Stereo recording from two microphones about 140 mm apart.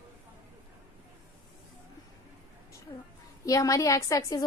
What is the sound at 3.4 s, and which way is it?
A woman's voice, 25° left (ahead or behind).